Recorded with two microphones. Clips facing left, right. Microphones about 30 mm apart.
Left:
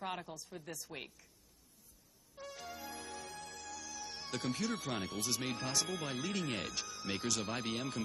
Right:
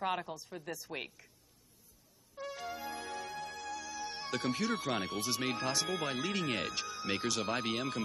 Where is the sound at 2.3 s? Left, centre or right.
Centre.